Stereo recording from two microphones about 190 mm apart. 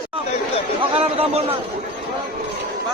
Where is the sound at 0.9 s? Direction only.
30° right (ahead or behind).